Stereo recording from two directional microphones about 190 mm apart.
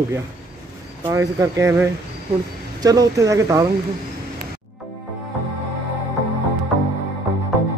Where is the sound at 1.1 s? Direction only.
15° right (ahead or behind).